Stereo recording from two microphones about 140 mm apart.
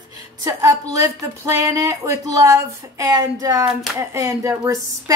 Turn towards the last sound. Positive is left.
turn(degrees=-25)  # may be behind; listen again after turning